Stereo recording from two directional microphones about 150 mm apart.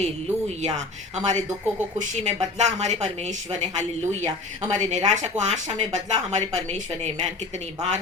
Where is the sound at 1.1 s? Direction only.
50° right (ahead or behind).